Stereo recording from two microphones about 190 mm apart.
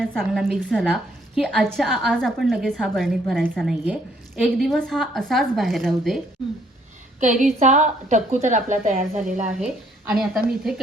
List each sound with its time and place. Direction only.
0.0 s a woman's voice: 5° left (ahead or behind)
7.2 s a woman's voice: 40° right (ahead or behind)
10.2 s a woman's voice: centre (ahead or behind)